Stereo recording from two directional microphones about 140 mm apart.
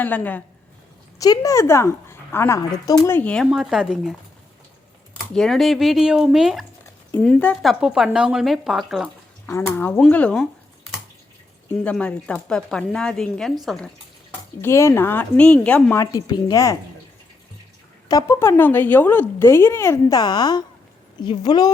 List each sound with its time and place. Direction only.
0.0 s a woman's voice: 10° left (ahead or behind)
1.2 s a woman's voice: 25° left (ahead or behind)
3.2 s a woman's voice: 10° left (ahead or behind)
3.4 s speech: 5° right (ahead or behind)
5.3 s speech: 5° left (ahead or behind)
7.3 s a woman's voice: 10° left (ahead or behind)
7.6 s speech: centre (ahead or behind)
9.5 s a woman's voice: 15° left (ahead or behind)
11.8 s a woman's voice: 10° left (ahead or behind)
14.6 s a woman's voice: 20° left (ahead or behind)
16.1 s a woman's voice: 25° left (ahead or behind)
18.1 s a woman's voice: 20° left (ahead or behind)